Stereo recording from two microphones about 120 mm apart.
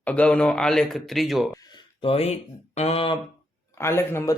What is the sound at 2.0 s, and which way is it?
Speech, 60° left (ahead or behind).